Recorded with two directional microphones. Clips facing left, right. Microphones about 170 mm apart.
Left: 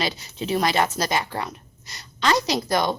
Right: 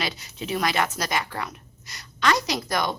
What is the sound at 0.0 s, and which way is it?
A woman's voice, 30° left (ahead or behind).